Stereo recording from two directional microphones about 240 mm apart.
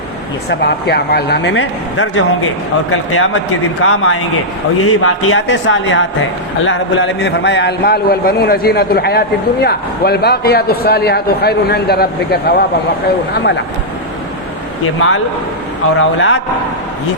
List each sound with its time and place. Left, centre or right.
0.5 s speech: left
2.0 s a man's voice: left
16.0 s speech: left